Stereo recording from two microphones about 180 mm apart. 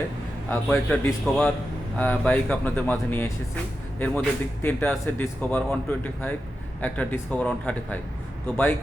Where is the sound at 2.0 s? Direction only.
10° left (ahead or behind).